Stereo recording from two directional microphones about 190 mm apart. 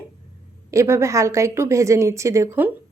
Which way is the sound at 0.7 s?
15° right (ahead or behind).